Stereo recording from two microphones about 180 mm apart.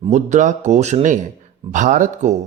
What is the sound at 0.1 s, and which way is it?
Speech, 40° right (ahead or behind).